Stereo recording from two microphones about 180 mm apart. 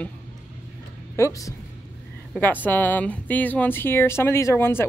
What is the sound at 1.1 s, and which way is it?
Speech, 15° left (ahead or behind).